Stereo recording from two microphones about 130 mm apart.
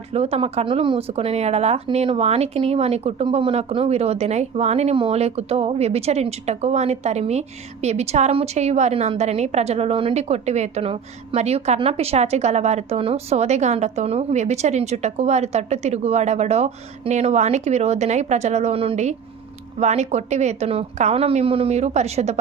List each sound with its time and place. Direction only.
0.1 s speech: 50° right (ahead or behind)